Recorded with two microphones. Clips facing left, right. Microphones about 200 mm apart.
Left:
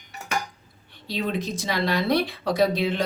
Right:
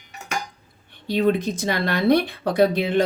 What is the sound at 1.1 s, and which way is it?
Speech, 50° right (ahead or behind).